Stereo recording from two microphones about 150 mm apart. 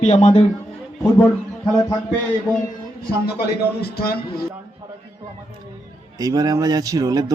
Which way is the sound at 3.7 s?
90° left.